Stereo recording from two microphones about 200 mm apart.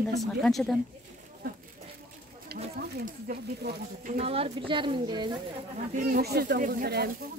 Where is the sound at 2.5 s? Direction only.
50° right (ahead or behind).